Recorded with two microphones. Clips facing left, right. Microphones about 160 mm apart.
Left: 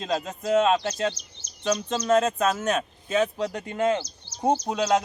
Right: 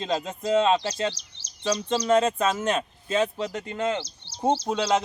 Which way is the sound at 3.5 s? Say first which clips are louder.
Right 1 dB; 15° left (ahead or behind).